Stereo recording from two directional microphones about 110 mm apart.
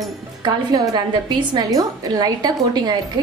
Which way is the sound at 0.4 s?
35° right (ahead or behind).